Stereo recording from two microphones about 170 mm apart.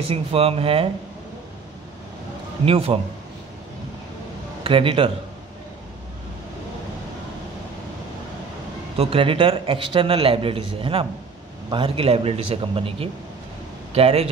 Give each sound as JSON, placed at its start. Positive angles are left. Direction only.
{"t": 0.1, "sound": "a man's voice", "side_deg": -35}
{"t": 2.6, "sound": "a man's voice", "side_deg": -35}
{"t": 4.6, "sound": "a man's voice", "side_deg": -30}
{"t": 8.9, "sound": "a man's voice", "side_deg": -35}